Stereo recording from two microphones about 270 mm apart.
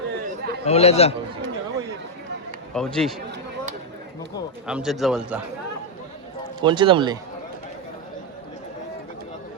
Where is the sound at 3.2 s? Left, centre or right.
Right.